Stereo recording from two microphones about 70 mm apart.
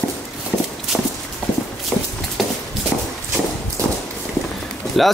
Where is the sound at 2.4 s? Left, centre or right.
Centre.